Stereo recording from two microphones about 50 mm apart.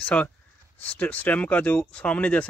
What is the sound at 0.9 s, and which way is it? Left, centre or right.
Speech, left.